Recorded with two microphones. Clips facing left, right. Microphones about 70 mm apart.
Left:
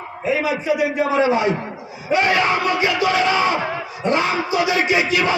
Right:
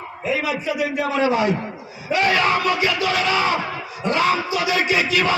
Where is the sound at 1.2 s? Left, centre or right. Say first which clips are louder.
Right 1 dB; left.